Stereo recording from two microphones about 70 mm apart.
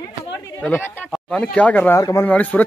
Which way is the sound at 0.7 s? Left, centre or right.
Left.